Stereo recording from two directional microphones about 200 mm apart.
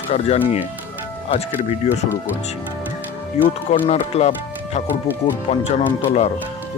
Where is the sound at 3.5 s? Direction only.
30° left (ahead or behind).